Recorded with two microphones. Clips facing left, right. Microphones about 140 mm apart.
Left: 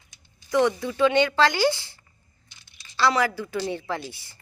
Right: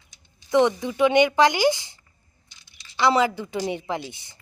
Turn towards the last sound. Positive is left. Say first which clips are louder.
# right 1 dB
turn(degrees=-20)  # may be behind; listen again after turning